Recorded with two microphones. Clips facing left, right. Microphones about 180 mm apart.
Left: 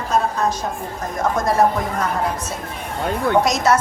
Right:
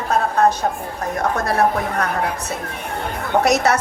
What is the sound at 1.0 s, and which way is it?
A woman's voice, 65° right (ahead or behind).